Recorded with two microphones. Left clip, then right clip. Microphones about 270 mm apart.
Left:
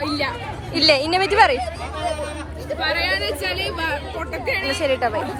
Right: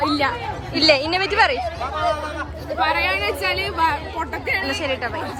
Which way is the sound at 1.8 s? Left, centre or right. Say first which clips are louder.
Right 3 dB; right.